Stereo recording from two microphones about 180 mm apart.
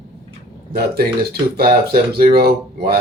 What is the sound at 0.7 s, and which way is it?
Speech, 60° right (ahead or behind).